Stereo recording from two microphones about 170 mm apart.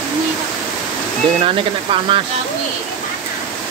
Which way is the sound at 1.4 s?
30° right (ahead or behind).